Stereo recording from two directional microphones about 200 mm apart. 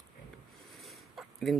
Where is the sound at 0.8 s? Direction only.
Centre (ahead or behind).